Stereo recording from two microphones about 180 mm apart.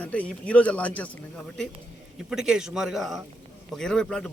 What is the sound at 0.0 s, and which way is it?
A man's voice, 10° left (ahead or behind).